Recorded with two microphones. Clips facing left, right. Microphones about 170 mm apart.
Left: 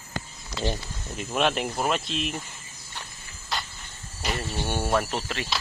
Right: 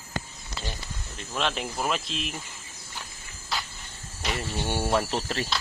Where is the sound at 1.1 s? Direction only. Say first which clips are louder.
Left 5 dB; 10° left (ahead or behind).